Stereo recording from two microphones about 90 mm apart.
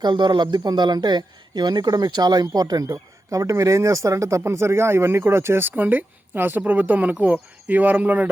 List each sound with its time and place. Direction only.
0.0 s a man's voice: 60° right (ahead or behind); by 8.3 s 20° right (ahead or behind)